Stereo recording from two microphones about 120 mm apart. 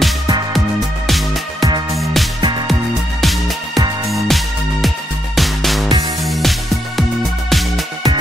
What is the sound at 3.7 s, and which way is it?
Music, 30° right (ahead or behind).